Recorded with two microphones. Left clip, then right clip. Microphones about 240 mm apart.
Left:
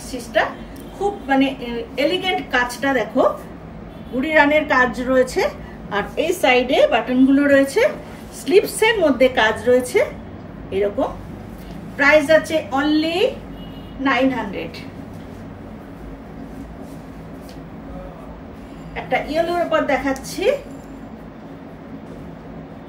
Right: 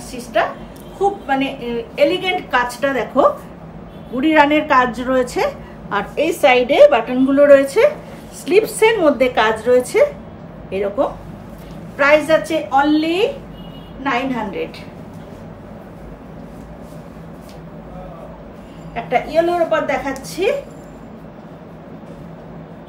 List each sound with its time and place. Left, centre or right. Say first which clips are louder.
0.1 s a woman's voice: right 1 dB; centre
14.0 s a woman's voice: left 1 dB; centre
18.9 s a woman's voice: right 4 dB; centre